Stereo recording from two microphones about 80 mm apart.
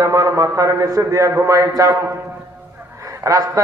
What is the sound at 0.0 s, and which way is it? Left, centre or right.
A man's voice, right.